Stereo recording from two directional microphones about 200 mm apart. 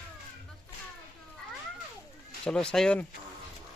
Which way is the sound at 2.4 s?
5° left (ahead or behind).